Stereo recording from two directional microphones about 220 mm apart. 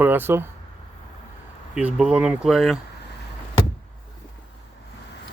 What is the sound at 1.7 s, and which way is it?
Speech, 5° right (ahead or behind).